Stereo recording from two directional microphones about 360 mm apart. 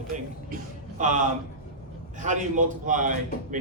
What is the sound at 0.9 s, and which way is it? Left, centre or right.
Speech, right.